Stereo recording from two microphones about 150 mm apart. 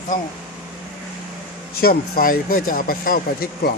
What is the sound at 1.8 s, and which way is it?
Speech, 85° left.